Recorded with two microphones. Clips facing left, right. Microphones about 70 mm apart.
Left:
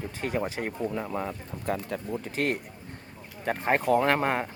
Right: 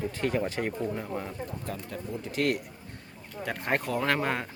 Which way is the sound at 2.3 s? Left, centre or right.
Left.